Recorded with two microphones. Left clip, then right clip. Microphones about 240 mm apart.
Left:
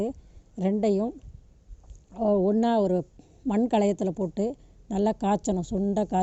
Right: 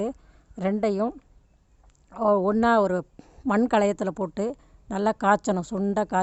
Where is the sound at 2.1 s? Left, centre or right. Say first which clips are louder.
Right 2 dB; centre.